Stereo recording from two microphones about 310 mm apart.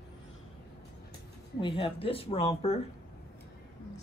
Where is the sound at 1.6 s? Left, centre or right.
Centre.